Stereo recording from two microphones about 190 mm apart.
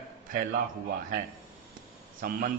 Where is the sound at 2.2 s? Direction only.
50° right (ahead or behind).